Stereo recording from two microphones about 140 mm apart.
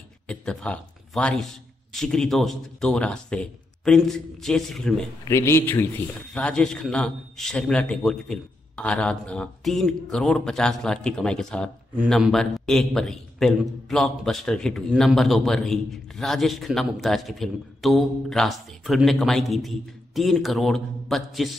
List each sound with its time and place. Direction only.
0.3 s a man's voice: 5° left (ahead or behind)
5.2 s a man's voice: 20° left (ahead or behind); by 21.5 s centre (ahead or behind)